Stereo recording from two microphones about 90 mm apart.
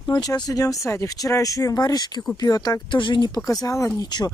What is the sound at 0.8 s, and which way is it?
Speech, 35° left (ahead or behind).